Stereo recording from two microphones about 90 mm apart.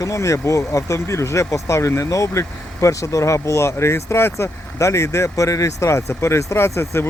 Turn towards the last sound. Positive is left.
turn(degrees=30)  # may be behind; listen again after turning